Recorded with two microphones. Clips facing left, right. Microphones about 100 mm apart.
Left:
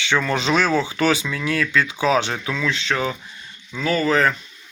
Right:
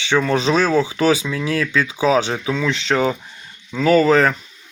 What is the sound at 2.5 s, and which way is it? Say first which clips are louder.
Speech: right 4 dB; 30° right (ahead or behind).